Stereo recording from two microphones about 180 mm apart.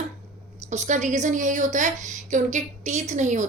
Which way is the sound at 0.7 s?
40° right (ahead or behind).